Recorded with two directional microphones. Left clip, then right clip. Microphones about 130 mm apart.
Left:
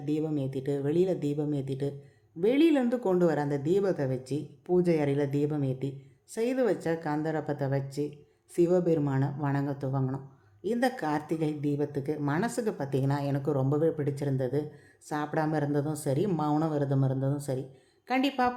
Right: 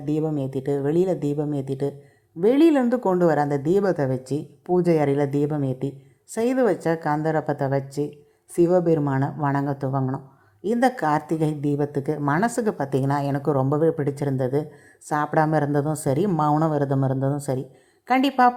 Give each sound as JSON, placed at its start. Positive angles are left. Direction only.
{"t": 0.0, "sound": "speech", "side_deg": -25}